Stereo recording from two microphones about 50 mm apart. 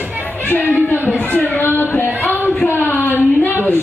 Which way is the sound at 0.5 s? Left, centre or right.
Left.